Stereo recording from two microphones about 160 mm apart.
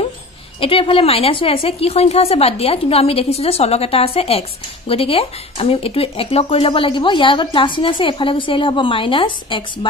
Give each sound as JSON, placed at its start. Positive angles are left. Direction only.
{"t": 0.6, "sound": "speech", "side_deg": 35}